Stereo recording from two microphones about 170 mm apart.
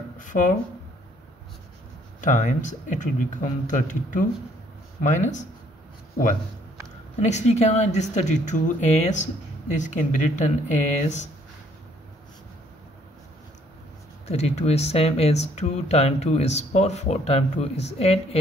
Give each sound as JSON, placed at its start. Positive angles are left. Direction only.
{"t": 0.2, "sound": "speech", "side_deg": 50}
{"t": 2.2, "sound": "speech", "side_deg": 45}
{"t": 7.2, "sound": "speech", "side_deg": 40}
{"t": 14.2, "sound": "speech", "side_deg": 40}